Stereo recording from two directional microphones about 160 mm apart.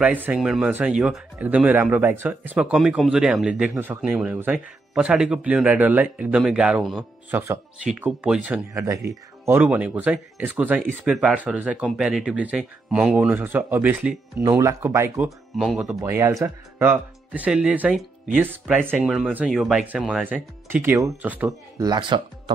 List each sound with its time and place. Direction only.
0.0 s speech: 10° right (ahead or behind)
15.2 s speech: centre (ahead or behind)
16.0 s speech: 20° right (ahead or behind)
21.5 s speech: 20° right (ahead or behind)